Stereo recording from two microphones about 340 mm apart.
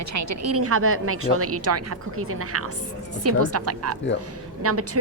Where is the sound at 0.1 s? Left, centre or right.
Right.